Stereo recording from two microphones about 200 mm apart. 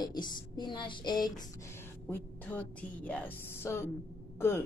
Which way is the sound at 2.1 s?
5° left (ahead or behind).